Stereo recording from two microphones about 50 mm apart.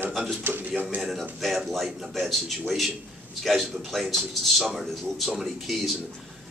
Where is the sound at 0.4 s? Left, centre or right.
Right.